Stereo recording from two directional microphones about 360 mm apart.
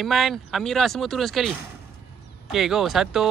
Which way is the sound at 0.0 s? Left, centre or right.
Centre.